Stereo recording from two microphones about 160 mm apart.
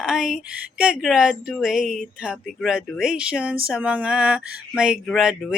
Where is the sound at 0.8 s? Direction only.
5° right (ahead or behind).